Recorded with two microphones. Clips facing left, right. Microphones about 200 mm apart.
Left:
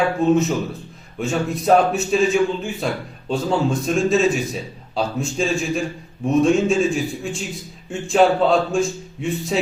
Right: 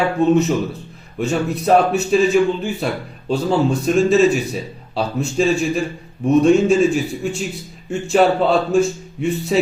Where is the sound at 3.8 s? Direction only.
Centre (ahead or behind).